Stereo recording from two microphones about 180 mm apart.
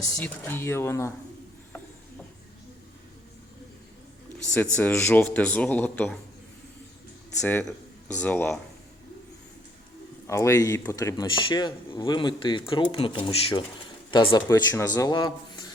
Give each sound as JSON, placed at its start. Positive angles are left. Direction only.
{"t": 0.2, "sound": "speech", "side_deg": 10}
{"t": 4.6, "sound": "speech", "side_deg": 10}
{"t": 7.4, "sound": "speech", "side_deg": 10}
{"t": 10.2, "sound": "speech", "side_deg": 15}